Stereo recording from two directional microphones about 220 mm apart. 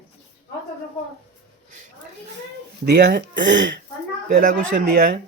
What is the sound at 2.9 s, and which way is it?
Speech, 45° right (ahead or behind).